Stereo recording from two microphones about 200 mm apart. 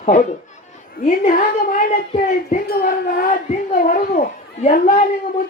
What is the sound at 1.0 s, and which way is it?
A child's voice, 40° left (ahead or behind).